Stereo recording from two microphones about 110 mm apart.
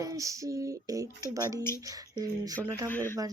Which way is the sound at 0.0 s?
30° right (ahead or behind).